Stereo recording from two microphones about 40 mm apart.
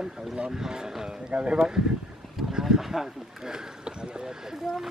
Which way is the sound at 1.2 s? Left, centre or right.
Right.